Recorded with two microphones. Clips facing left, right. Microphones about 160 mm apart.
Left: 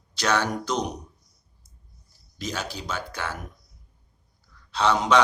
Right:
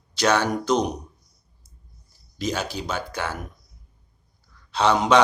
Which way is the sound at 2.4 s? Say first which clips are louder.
Right 5 dB; 20° right (ahead or behind).